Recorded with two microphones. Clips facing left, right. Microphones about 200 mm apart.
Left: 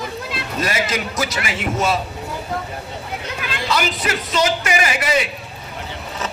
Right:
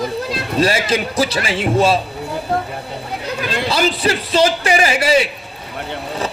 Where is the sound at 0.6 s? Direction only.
30° right (ahead or behind).